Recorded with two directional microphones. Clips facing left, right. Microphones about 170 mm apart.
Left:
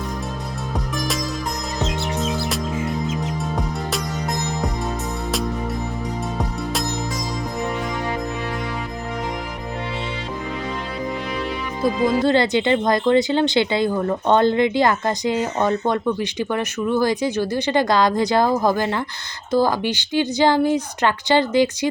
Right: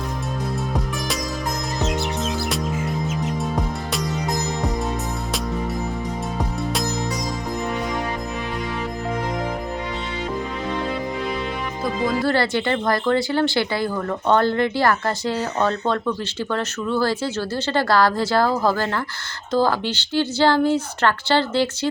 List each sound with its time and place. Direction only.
11.8 s speech: 20° left (ahead or behind)